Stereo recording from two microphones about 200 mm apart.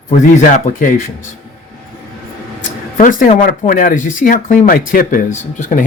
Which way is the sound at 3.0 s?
40° left (ahead or behind).